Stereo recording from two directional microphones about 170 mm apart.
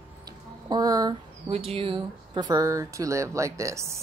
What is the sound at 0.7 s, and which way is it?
Speech, 20° right (ahead or behind).